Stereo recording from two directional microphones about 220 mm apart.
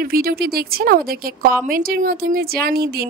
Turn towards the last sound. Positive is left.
turn(degrees=-45)  # may be behind; listen again after turning